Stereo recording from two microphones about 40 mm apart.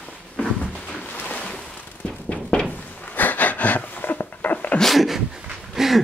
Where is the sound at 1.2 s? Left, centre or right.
Left.